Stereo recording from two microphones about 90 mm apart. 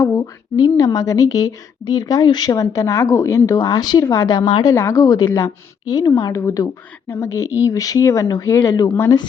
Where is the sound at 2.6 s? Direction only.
35° left (ahead or behind).